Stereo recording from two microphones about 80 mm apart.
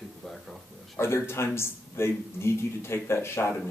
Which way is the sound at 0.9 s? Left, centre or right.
Left.